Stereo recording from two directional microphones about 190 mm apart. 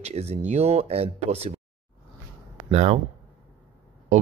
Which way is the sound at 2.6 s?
35° right (ahead or behind).